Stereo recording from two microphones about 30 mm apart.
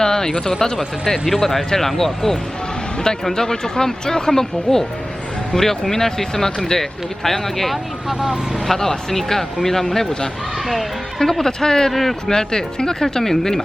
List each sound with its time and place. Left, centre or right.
0.0 s a sound: centre
0.6 s speech: centre
1.3 s speech: centre
8.2 s speech: centre
8.6 s speech: centre
11.2 s speech: centre
11.9 s speech: centre
12.3 s speech: left